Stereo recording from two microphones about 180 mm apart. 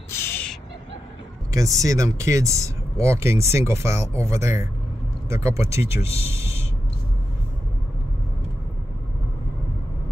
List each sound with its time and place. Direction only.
0.1 s a sound: 15° left (ahead or behind)
1.5 s speech: 15° right (ahead or behind)
6.0 s speech: 35° left (ahead or behind)
6.3 s owl: 15° right (ahead or behind)